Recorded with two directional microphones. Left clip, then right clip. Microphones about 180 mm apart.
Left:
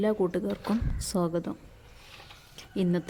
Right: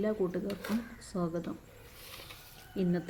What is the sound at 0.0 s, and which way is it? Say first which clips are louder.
A woman's voice: left 5 dB; 40° left (ahead or behind).